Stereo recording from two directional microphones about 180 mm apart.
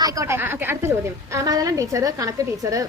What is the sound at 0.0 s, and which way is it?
A woman's voice, 20° right (ahead or behind).